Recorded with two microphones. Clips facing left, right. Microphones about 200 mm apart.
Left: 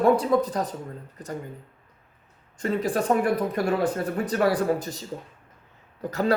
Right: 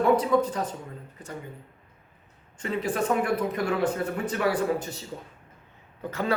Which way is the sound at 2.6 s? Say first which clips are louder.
Left 3 dB; 35° left (ahead or behind).